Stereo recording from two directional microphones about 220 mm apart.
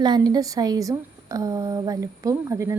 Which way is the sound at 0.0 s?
20° right (ahead or behind).